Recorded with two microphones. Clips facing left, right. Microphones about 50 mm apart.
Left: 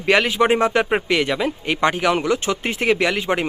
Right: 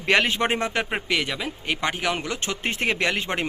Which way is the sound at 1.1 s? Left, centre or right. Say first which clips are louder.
Left 6 dB; centre.